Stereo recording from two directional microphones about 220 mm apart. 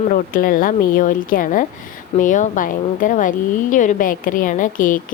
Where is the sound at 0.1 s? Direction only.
40° left (ahead or behind).